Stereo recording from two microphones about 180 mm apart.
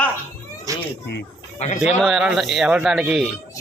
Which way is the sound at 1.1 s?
65° left (ahead or behind).